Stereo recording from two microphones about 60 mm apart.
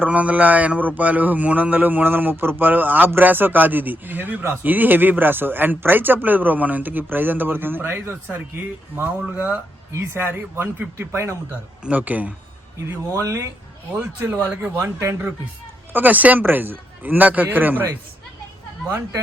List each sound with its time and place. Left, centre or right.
0.0 s a man's voice: right
9.9 s speech: right
11.9 s a man's voice: right
13.1 s speech: right
14.8 s speech: right
15.9 s a man's voice: right